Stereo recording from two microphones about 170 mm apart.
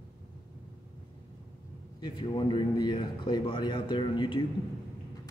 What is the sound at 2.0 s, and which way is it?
A man's voice, 30° left (ahead or behind).